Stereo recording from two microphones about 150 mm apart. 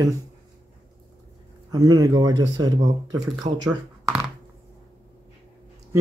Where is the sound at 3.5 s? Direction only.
45° right (ahead or behind).